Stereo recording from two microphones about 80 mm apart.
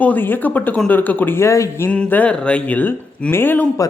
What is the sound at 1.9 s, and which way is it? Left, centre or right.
Speech, centre.